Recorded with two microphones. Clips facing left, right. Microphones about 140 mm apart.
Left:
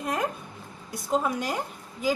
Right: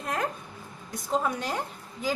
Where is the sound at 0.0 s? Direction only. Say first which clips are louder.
Left 2 dB; 5° left (ahead or behind).